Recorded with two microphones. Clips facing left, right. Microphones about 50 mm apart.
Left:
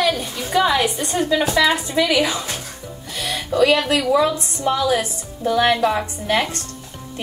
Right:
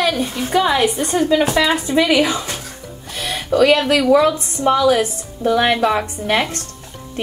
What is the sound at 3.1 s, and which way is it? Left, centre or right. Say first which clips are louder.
Music: right 4 dB; right.